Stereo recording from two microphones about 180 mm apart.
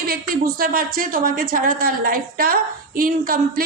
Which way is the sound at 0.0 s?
55° right (ahead or behind).